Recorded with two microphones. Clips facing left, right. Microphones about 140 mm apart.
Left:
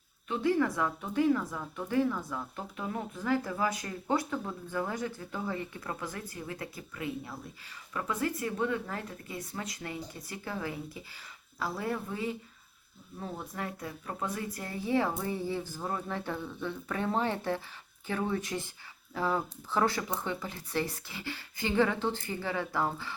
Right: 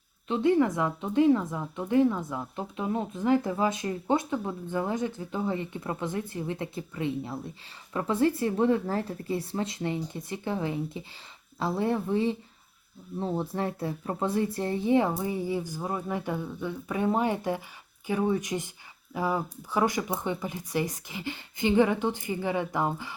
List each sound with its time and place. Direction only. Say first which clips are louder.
0.3 s a woman's voice: right 5 dB; 20° right (ahead or behind)